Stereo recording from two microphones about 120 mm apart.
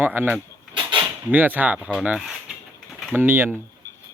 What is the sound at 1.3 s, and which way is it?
Speech, 15° right (ahead or behind).